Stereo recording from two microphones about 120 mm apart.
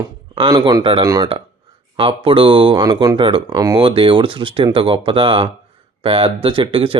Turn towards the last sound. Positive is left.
turn(degrees=-50)  # may be behind; listen again after turning